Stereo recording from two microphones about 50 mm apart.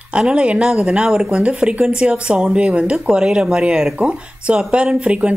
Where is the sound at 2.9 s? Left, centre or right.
Centre.